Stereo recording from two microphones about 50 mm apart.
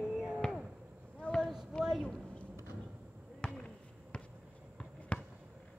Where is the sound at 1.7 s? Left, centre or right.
Centre.